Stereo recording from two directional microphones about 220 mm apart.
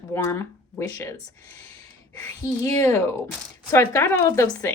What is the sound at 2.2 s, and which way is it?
Speech, 15° left (ahead or behind).